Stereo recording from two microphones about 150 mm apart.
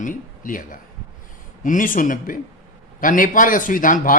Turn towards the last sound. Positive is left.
turn(degrees=60)  # may be behind; listen again after turning